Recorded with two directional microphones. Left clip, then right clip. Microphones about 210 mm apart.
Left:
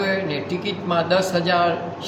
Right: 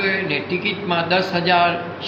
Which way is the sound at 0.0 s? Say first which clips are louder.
Right 2 dB; 20° left (ahead or behind).